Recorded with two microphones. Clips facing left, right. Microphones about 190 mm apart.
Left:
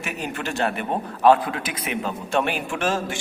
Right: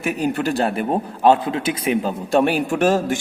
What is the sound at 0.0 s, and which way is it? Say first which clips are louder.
A man's voice: right 9 dB; 35° right (ahead or behind).